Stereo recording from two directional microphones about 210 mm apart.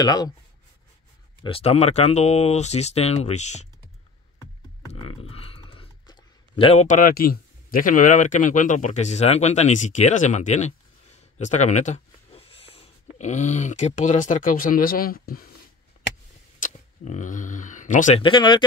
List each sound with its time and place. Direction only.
0.0 s speech: 20° left (ahead or behind)
1.4 s speech: 25° left (ahead or behind)
4.8 s speech: 25° left (ahead or behind); by 15.5 s 45° left (ahead or behind)
16.6 s speech: 35° left (ahead or behind)